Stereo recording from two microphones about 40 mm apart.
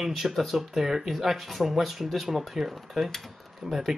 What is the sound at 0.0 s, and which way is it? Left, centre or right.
Speech, centre.